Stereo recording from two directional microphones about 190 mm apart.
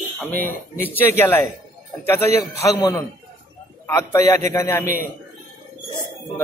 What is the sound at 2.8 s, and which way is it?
A man's voice, 20° left (ahead or behind).